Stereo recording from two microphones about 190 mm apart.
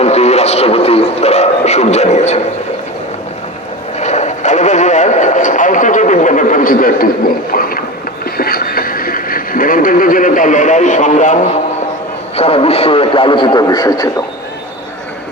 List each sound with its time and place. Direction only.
0.0 s speech: 35° left (ahead or behind)
4.0 s speech: 35° left (ahead or behind)
7.5 s rowboat: 50° left (ahead or behind)
8.2 s vehicle: 50° left (ahead or behind)
12.4 s speech: 30° left (ahead or behind)